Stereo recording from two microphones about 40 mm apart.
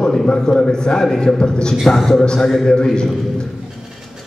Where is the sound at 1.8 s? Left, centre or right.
Centre.